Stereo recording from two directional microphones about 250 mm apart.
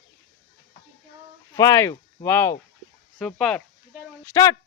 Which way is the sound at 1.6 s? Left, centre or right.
Centre.